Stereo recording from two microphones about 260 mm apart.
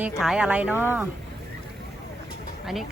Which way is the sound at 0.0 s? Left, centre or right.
Centre.